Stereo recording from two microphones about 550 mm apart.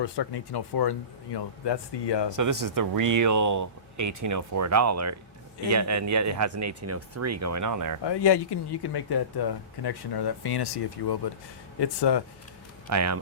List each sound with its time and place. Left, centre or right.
0.0 s speech: left
2.3 s speech: right
8.0 s speech: left
12.9 s speech: right